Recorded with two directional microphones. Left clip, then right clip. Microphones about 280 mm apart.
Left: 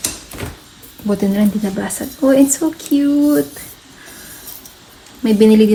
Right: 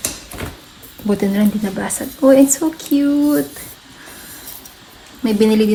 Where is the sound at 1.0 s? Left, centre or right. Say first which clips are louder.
Even; right.